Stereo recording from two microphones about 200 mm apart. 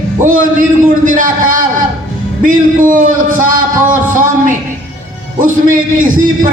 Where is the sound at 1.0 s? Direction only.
40° right (ahead or behind).